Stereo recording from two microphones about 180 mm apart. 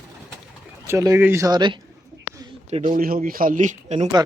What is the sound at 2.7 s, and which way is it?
Speech, 40° right (ahead or behind).